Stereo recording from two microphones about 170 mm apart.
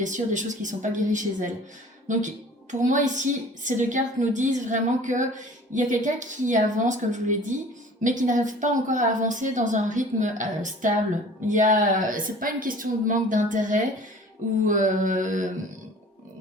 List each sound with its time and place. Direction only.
0.0 s a woman's voice: 45° right (ahead or behind)